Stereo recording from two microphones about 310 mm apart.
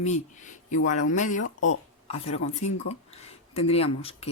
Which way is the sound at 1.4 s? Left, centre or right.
Left.